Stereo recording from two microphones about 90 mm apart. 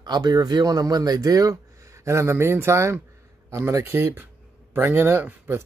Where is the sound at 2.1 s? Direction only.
30° right (ahead or behind).